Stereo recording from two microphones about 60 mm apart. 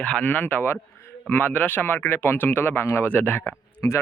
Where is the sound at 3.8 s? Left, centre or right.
Left.